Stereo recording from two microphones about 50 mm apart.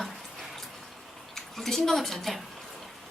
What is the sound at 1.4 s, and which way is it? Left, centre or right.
A woman's voice, centre.